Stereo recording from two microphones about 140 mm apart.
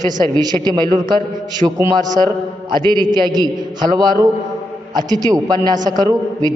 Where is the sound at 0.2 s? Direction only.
30° right (ahead or behind).